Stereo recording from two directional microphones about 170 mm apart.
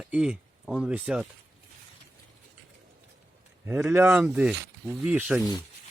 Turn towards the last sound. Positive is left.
turn(degrees=-5)  # may be behind; listen again after turning